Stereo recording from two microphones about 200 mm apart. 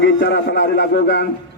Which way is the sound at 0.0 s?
60° left (ahead or behind).